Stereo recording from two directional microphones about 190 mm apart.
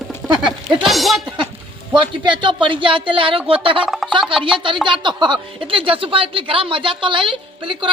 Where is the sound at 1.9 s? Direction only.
25° right (ahead or behind).